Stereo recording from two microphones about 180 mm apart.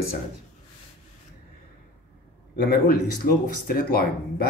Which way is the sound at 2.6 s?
55° left (ahead or behind).